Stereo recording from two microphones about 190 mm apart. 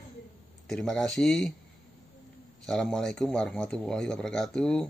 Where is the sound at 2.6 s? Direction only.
5° left (ahead or behind).